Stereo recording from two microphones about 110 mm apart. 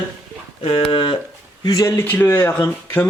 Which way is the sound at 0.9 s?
55° left (ahead or behind).